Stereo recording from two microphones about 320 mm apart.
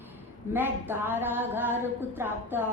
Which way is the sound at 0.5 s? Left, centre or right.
Centre.